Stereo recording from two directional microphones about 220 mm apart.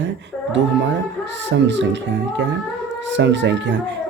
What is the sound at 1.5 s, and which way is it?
Speech, 55° right (ahead or behind).